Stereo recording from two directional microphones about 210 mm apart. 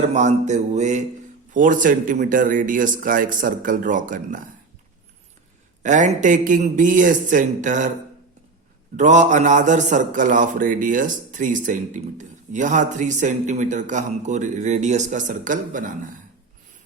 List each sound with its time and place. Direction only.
0.1 s a man's voice: 35° right (ahead or behind)
5.8 s a man's voice: 35° right (ahead or behind)
9.0 s a man's voice: 35° right (ahead or behind)